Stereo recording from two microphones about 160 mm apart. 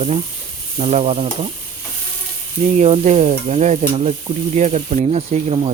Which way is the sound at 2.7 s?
45° right (ahead or behind).